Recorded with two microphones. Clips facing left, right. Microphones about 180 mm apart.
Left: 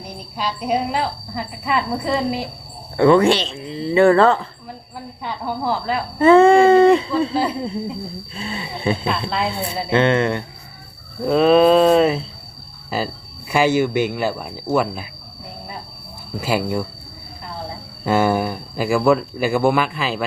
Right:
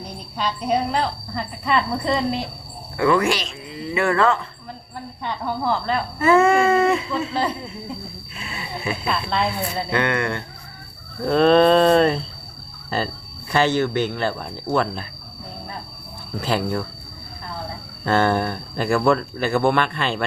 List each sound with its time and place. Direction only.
0.0 s speech: 10° left (ahead or behind)
3.0 s speech: 30° left (ahead or behind)
4.9 s speech: 5° left (ahead or behind)
6.1 s speech: 30° left (ahead or behind)
8.4 s speech: 30° left (ahead or behind)
11.2 s speech: 5° left (ahead or behind)
16.4 s speech: 10° left (ahead or behind)
18.0 s speech: 10° left (ahead or behind)